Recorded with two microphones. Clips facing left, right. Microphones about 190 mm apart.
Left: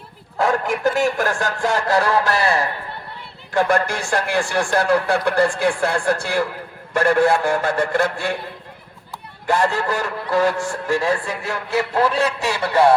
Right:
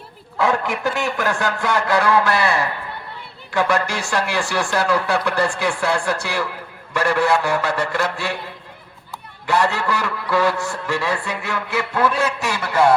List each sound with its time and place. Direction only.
0.3 s a man's voice: 45° left (ahead or behind)
9.5 s a man's voice: 45° left (ahead or behind)